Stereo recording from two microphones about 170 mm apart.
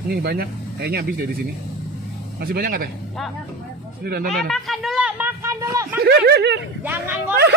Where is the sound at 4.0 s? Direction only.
65° right (ahead or behind).